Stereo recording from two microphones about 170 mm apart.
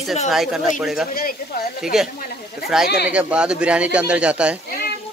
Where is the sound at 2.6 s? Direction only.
5° right (ahead or behind).